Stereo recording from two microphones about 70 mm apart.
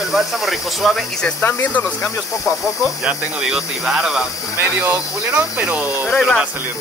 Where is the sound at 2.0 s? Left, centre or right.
Left.